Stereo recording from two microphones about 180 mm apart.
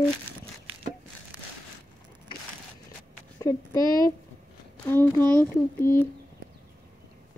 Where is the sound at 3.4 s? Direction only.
20° left (ahead or behind).